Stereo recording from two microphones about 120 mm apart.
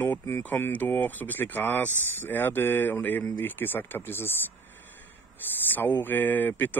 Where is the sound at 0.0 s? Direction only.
20° left (ahead or behind).